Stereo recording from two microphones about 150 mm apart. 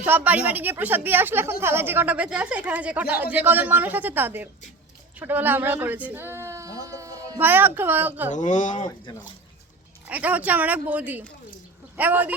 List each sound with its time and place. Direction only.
0.0 s a woman's voice: 10° right (ahead or behind)
8.3 s speech: 55° left (ahead or behind)
10.1 s a woman's voice: 10° right (ahead or behind)